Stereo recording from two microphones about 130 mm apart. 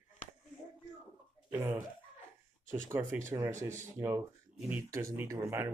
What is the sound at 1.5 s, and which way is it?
Speech, 15° right (ahead or behind).